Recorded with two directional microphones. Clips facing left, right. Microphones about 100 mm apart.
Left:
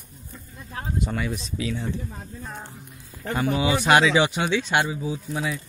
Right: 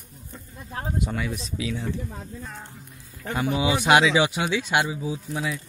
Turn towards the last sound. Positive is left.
turn(degrees=-5)  # may be behind; listen again after turning